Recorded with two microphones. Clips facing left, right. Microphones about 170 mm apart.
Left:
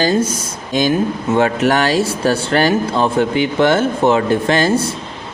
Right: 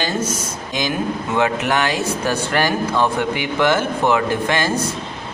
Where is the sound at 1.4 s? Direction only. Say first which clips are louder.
Left 4 dB; 35° left (ahead or behind).